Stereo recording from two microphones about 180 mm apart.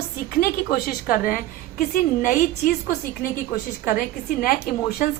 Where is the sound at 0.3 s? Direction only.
55° left (ahead or behind).